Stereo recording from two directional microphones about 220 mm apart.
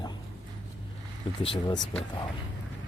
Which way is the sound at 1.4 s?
25° left (ahead or behind).